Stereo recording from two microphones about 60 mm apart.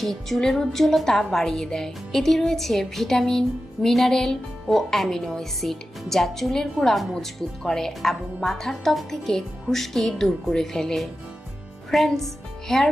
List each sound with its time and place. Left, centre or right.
0.0 s speech: centre